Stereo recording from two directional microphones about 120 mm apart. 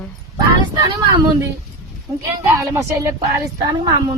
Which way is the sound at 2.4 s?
25° right (ahead or behind).